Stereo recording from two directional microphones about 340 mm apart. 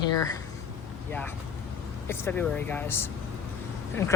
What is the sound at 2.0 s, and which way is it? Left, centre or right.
A man's voice, centre.